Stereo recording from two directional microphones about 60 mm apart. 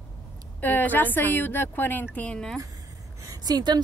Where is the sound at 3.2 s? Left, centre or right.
Right.